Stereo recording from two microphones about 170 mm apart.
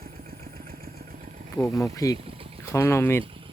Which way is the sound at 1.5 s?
15° left (ahead or behind).